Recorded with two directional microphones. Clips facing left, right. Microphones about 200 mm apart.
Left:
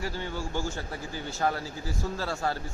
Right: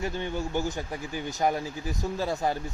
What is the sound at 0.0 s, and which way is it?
Speech, 20° right (ahead or behind).